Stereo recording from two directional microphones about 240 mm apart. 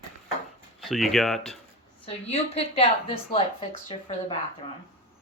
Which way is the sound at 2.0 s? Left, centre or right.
Left.